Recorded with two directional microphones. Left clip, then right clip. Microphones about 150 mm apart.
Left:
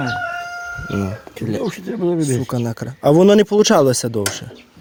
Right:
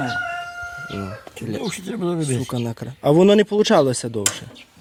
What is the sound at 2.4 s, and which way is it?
Speech, 20° left (ahead or behind).